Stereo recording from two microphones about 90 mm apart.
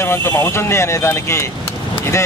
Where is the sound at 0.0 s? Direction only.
25° left (ahead or behind).